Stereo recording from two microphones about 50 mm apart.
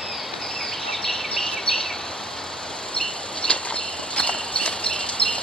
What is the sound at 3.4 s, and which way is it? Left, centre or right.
Clip-clop, left.